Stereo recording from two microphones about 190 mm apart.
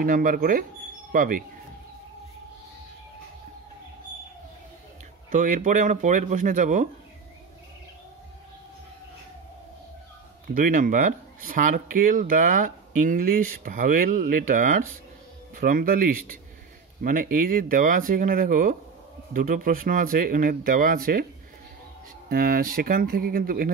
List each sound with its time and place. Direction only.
0.0 s speech: 45° right (ahead or behind)
5.3 s speech: 40° right (ahead or behind)
10.5 s speech: 45° right (ahead or behind)
22.3 s speech: 50° right (ahead or behind)